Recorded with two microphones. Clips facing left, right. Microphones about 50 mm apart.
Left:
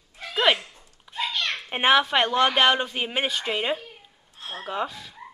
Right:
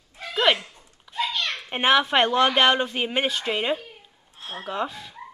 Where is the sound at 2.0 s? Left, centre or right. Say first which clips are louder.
Right 1 dB; centre.